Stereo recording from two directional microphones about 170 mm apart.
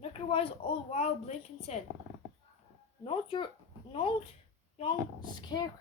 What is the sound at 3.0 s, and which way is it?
Speech, 30° left (ahead or behind).